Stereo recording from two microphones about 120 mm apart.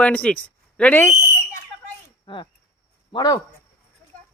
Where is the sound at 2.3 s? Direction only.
45° left (ahead or behind).